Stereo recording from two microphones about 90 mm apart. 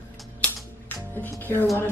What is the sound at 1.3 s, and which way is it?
Speech, 25° left (ahead or behind).